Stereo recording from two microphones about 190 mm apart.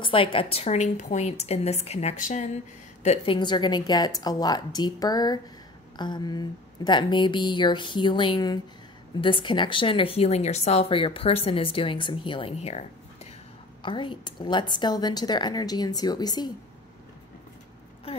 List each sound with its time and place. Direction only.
0.0 s a woman's voice: 25° left (ahead or behind)
3.3 s speech: 25° left (ahead or behind)
18.1 s a sound: 30° left (ahead or behind)